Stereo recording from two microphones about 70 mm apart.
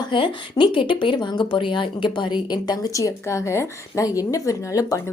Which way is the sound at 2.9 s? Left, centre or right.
Left.